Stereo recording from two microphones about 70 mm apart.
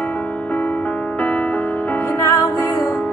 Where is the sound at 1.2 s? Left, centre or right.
Centre.